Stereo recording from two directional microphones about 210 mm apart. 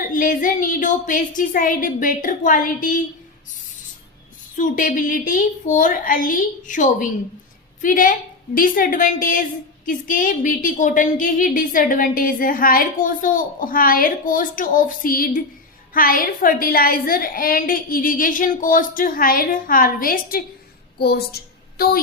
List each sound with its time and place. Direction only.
0.1 s a woman's voice: 40° left (ahead or behind)
4.5 s a woman's voice: 40° left (ahead or behind)